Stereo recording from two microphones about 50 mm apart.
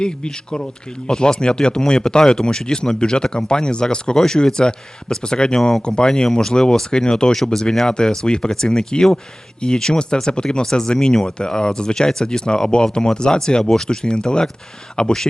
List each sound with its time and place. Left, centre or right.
0.5 s speech: centre
5.8 s speech: centre
7.3 s speech: centre